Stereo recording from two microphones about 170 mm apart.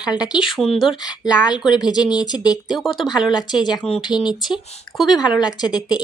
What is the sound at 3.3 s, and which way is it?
Speech, 25° left (ahead or behind).